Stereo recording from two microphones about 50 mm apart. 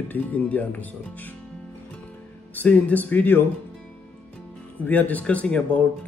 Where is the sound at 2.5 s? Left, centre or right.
Left.